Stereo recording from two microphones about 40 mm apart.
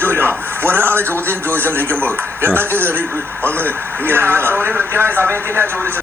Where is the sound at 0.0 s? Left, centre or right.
Right.